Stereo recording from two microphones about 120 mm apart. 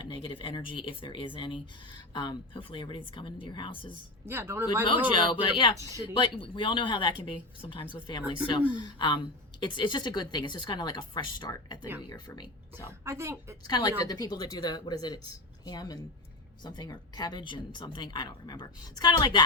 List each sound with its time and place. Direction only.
0.0 s a woman's voice: 45° left (ahead or behind)
4.3 s a woman's voice: 20° right (ahead or behind)
5.1 s a woman's voice: 40° left (ahead or behind)
12.7 s a woman's voice: 25° right (ahead or behind)
13.7 s a woman's voice: 35° left (ahead or behind)